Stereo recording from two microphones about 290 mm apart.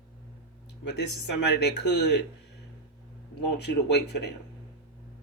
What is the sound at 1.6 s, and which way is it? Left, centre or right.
Speech, left.